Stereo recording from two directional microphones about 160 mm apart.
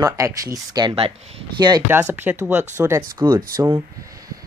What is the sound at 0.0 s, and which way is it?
Speech, 20° right (ahead or behind).